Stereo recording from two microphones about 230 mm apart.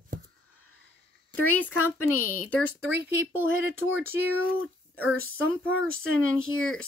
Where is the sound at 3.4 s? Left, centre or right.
Left.